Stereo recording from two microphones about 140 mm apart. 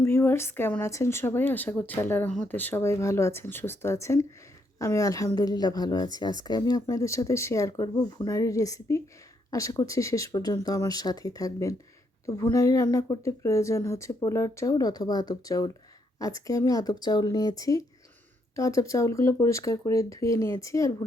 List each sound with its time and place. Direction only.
0.0 s a woman's voice: 15° left (ahead or behind)